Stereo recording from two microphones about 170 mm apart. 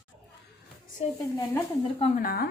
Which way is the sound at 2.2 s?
60° left (ahead or behind).